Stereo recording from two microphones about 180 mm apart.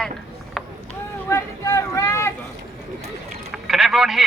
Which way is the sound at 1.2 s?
15° left (ahead or behind).